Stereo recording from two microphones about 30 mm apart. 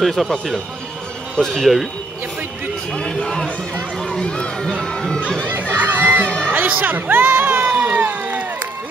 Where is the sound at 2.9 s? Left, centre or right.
Left.